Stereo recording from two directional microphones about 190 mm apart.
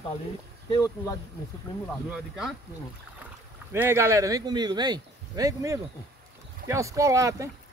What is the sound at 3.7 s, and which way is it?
Speech, 15° right (ahead or behind).